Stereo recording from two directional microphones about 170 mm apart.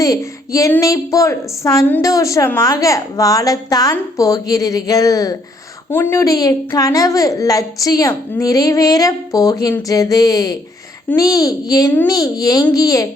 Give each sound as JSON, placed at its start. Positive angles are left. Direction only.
{"t": 0.0, "sound": "speech", "side_deg": 20}